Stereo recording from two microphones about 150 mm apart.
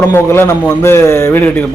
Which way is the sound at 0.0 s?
15° left (ahead or behind).